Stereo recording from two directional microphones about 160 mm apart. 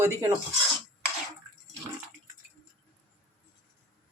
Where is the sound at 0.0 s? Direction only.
15° right (ahead or behind).